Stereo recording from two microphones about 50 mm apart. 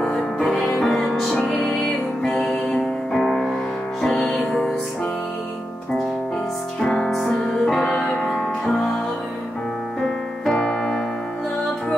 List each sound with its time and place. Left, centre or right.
0.0 s music: centre
6.8 s music: centre
7.3 s music: centre
10.0 s piano: centre
10.6 s music: centre